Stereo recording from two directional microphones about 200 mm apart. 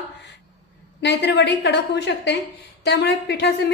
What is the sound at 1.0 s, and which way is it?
A woman's voice, 60° left (ahead or behind).